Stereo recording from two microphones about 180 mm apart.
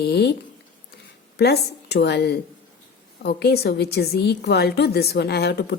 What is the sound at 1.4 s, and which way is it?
A woman's voice, 65° left (ahead or behind).